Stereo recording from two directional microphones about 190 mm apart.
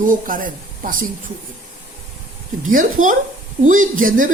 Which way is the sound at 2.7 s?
45° right (ahead or behind).